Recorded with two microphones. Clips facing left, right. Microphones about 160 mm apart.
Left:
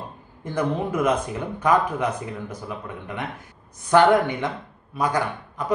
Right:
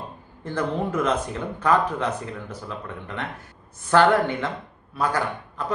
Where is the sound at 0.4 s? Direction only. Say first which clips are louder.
Left 1 dB; 10° left (ahead or behind).